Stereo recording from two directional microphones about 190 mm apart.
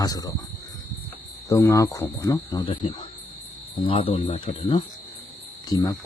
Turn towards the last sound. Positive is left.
turn(degrees=20)  # may be behind; listen again after turning